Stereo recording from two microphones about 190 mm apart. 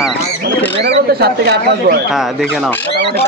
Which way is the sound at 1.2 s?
55° right (ahead or behind).